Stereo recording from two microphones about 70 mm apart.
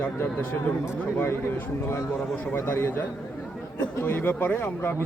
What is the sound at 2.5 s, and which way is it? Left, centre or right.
Speech, left.